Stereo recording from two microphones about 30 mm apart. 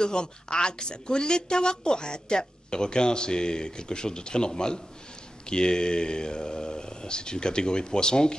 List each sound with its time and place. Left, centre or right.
0.0 s speech: left